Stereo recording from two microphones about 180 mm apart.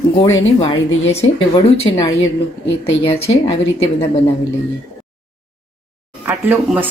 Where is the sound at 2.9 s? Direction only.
90° left.